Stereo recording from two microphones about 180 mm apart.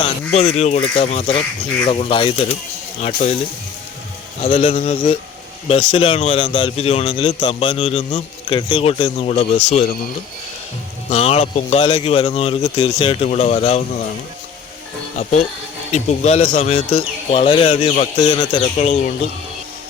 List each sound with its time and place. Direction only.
0.3 s a man's voice: 35° left (ahead or behind)
4.4 s a man's voice: 30° left (ahead or behind)
11.1 s a man's voice: 35° left (ahead or behind)
15.2 s a man's voice: 40° left (ahead or behind)
16.7 s a man's voice: 30° left (ahead or behind)